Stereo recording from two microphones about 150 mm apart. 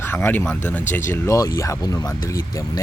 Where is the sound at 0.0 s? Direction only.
15° left (ahead or behind).